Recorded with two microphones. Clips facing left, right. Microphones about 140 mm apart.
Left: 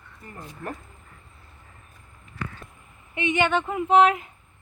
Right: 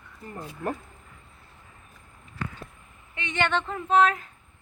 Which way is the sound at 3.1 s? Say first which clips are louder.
Left 4 dB; 15° left (ahead or behind).